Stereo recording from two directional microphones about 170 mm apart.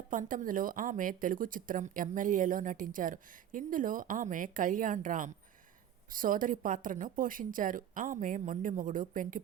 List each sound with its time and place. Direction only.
0.1 s speech: 50° right (ahead or behind)